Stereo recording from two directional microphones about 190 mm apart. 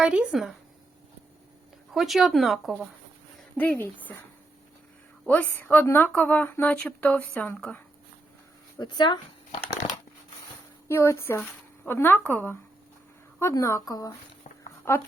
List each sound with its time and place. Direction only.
0.0 s speech: 5° right (ahead or behind)
1.9 s speech: centre (ahead or behind)
5.2 s speech: 10° left (ahead or behind)
8.8 s speech: 25° left (ahead or behind)
10.8 s speech: 15° left (ahead or behind)
14.6 s a sound: 10° left (ahead or behind)